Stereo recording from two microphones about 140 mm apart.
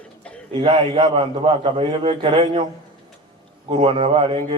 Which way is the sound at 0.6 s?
35° right (ahead or behind).